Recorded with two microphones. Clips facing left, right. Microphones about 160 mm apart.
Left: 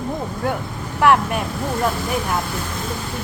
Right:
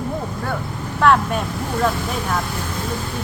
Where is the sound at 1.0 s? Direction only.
15° left (ahead or behind).